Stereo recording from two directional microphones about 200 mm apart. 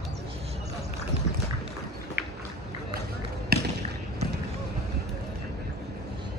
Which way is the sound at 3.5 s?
50° right (ahead or behind).